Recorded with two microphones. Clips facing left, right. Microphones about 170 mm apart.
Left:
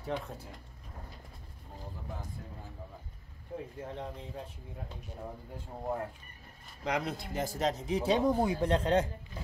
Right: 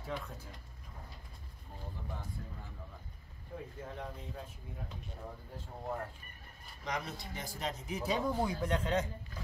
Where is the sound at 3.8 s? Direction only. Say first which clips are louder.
Left 2 dB; 25° left (ahead or behind).